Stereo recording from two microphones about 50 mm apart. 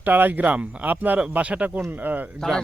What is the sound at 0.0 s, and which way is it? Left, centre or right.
Speech, right.